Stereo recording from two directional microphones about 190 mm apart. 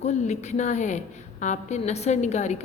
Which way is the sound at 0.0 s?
35° left (ahead or behind).